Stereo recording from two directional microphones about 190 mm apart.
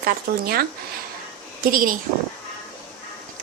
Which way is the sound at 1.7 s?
45° right (ahead or behind).